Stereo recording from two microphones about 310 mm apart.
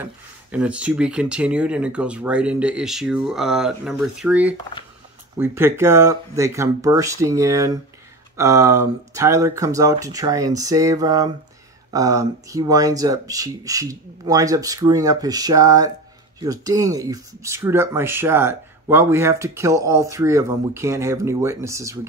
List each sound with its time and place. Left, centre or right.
0.0 s speech: centre